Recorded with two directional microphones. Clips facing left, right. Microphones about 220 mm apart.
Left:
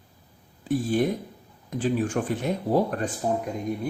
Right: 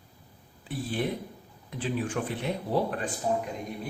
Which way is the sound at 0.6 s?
45° left (ahead or behind).